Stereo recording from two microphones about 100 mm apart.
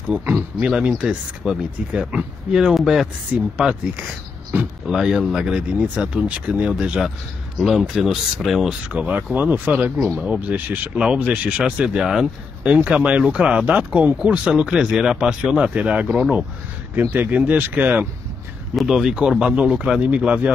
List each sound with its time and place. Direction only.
0.0 s speech: 15° right (ahead or behind)
8.8 s speech: 15° right (ahead or behind)
9.9 s speech: centre (ahead or behind)
10.3 s speech: 15° right (ahead or behind)
18.8 s speech: 5° right (ahead or behind)